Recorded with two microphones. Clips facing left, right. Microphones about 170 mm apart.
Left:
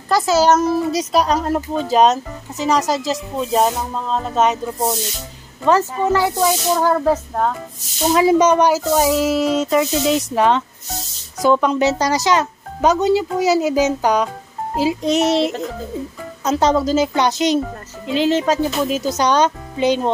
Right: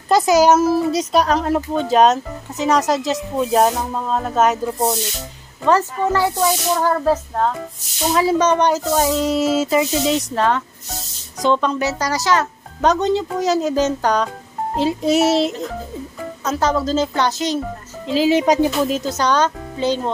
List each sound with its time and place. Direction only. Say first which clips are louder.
0.1 s speech: right 2 dB; 15° right (ahead or behind)
5.7 s speech: left 1 dB; 15° left (ahead or behind); by 10.2 s centre (ahead or behind)
10.3 s speech: left 3 dB; 15° left (ahead or behind)
12.8 s speech: left 2 dB; 5° left (ahead or behind)
16.4 s speech: left 3 dB; 20° left (ahead or behind)
18.0 s speech: right 1 dB; centre (ahead or behind)
18.3 s speech: right 2 dB; 15° right (ahead or behind)
19.0 s speech: left 2 dB; 15° left (ahead or behind)